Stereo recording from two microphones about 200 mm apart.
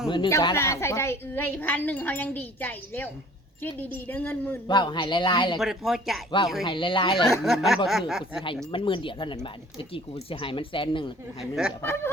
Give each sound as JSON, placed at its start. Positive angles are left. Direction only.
{"t": 0.1, "sound": "a woman's voice", "side_deg": 20}
{"t": 4.7, "sound": "speech", "side_deg": 25}
{"t": 5.5, "sound": "speech", "side_deg": 0}
{"t": 6.7, "sound": "speech", "side_deg": 25}
{"t": 7.3, "sound": "speech", "side_deg": 0}
{"t": 8.7, "sound": "speech", "side_deg": 25}
{"t": 11.8, "sound": "a woman's voice", "side_deg": 10}